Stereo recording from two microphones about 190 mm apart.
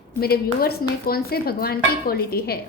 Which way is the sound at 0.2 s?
55° left (ahead or behind).